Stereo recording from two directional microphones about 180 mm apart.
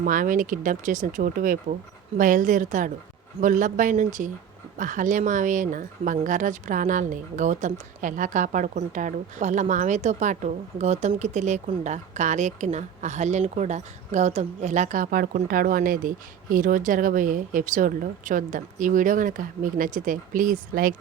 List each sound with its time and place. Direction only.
0.0 s speech: 45° right (ahead or behind)